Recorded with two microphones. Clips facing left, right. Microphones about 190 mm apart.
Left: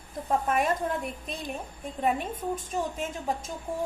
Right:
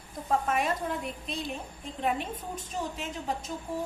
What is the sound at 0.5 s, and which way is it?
A woman's voice, 50° left (ahead or behind).